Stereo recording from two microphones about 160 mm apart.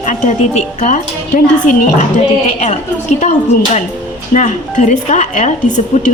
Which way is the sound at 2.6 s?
45° left (ahead or behind).